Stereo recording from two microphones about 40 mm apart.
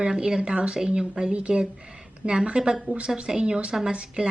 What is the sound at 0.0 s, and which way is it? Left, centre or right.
A woman's voice, right.